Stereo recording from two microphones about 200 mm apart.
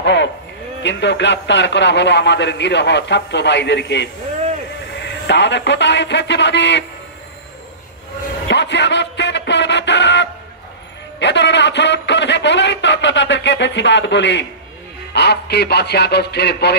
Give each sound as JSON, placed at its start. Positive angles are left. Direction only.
{"t": 0.0, "sound": "a sound", "side_deg": 60}
{"t": 0.8, "sound": "a man's voice", "side_deg": 60}
{"t": 5.2, "sound": "a man's voice", "side_deg": 60}
{"t": 8.5, "sound": "music", "side_deg": 60}
{"t": 11.1, "sound": "a sound", "side_deg": 60}
{"t": 15.1, "sound": "a man's voice", "side_deg": 55}